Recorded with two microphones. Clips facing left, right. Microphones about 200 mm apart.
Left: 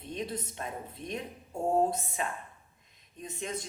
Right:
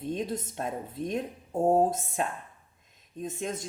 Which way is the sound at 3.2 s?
45° right (ahead or behind).